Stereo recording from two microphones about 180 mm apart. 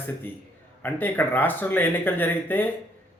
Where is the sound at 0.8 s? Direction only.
10° left (ahead or behind).